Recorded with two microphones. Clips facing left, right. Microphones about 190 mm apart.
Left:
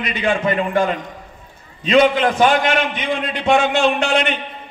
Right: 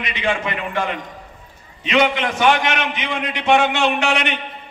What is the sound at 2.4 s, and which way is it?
A man's voice, 70° right (ahead or behind).